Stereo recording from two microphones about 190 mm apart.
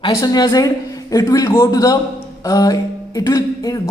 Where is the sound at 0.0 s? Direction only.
20° left (ahead or behind).